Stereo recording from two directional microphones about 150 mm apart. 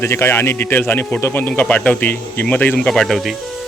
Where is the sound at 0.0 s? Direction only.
15° left (ahead or behind).